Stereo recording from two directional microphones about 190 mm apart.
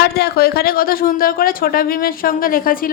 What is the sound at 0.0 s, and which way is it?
A woman's voice, 55° left (ahead or behind).